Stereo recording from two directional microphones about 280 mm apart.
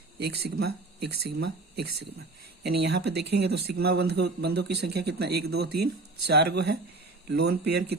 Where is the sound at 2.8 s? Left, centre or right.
Right.